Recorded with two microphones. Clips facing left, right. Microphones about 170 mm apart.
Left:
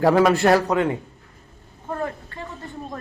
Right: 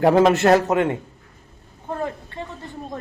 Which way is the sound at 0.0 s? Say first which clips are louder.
Right 1 dB; 20° right (ahead or behind).